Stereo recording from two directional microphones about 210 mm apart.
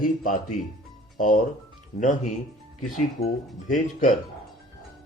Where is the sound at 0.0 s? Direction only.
40° left (ahead or behind).